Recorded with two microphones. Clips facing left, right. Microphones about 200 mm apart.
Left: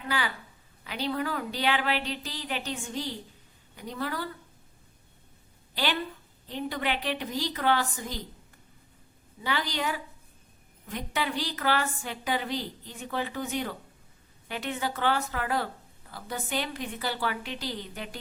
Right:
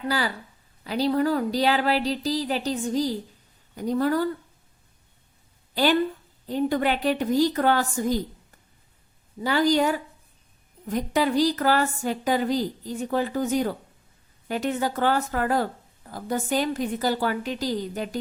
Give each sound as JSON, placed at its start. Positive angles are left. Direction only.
{"t": 0.1, "sound": "a woman's voice", "side_deg": -35}
{"t": 5.7, "sound": "a woman's voice", "side_deg": -45}
{"t": 9.4, "sound": "a woman's voice", "side_deg": -40}